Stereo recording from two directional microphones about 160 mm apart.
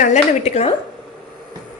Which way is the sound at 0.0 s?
45° left (ahead or behind).